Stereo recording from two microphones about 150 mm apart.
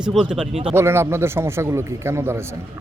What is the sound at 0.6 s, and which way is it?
A man's voice, 15° right (ahead or behind).